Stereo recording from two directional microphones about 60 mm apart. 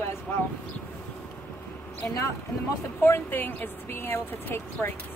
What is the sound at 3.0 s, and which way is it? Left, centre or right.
Speech, left.